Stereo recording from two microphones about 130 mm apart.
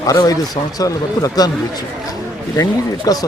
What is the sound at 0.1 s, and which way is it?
Speech, 30° left (ahead or behind).